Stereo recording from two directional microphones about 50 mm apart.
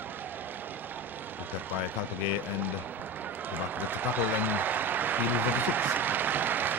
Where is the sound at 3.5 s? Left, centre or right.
Right.